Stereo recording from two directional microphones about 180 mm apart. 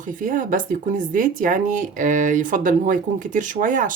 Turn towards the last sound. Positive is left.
turn(degrees=-45)  # may be behind; listen again after turning